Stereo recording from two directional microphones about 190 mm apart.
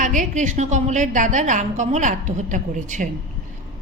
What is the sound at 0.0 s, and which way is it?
A woman's voice, 40° right (ahead or behind).